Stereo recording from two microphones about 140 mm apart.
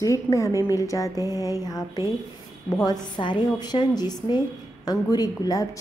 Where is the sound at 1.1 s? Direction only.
20° right (ahead or behind).